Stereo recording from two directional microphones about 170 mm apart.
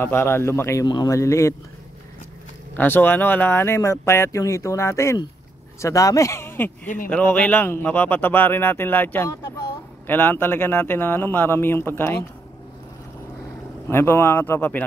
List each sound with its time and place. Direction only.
0.0 s speech: 15° left (ahead or behind)
2.7 s speech: 10° left (ahead or behind)
13.8 s speech: 15° left (ahead or behind)